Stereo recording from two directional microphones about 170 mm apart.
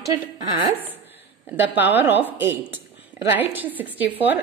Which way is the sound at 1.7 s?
10° right (ahead or behind).